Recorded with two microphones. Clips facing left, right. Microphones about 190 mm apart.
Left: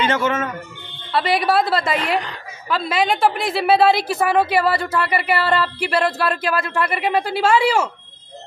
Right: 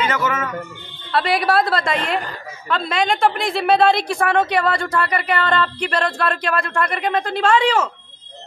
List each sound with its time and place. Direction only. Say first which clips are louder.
0.1 s a man's voice: left 2 dB; 30° left (ahead or behind)
1.1 s a woman's voice: even; centre (ahead or behind)